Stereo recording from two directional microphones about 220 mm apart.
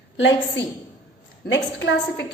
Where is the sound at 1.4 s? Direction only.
55° left (ahead or behind).